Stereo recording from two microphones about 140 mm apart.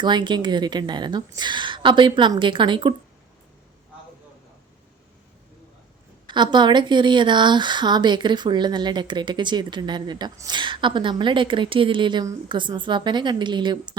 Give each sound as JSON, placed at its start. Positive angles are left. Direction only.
{"t": 0.0, "sound": "speech", "side_deg": -35}
{"t": 6.2, "sound": "speech", "side_deg": -35}